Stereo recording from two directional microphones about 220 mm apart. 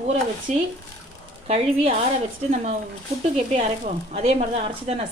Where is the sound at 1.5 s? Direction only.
30° right (ahead or behind).